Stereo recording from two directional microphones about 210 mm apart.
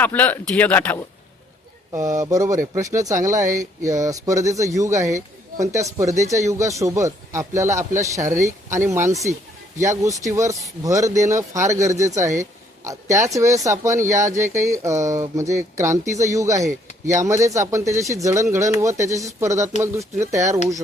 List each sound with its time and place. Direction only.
0.0 s speech: 10° left (ahead or behind)
1.9 s speech: 15° right (ahead or behind)